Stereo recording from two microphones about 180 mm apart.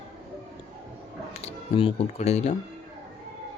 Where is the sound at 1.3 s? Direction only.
35° left (ahead or behind).